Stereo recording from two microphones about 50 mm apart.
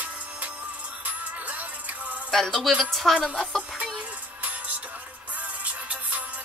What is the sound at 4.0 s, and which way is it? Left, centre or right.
Music, right.